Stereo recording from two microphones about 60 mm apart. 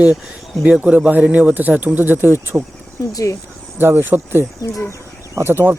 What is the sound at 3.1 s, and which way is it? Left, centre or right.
Speech, left.